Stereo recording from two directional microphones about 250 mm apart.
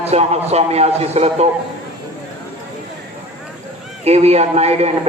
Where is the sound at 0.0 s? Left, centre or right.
Right.